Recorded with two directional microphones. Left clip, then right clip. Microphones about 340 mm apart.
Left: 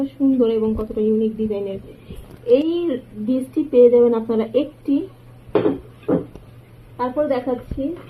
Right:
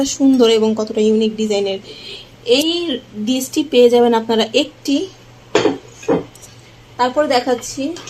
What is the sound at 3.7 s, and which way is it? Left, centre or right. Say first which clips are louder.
Speech: right 2 dB; right.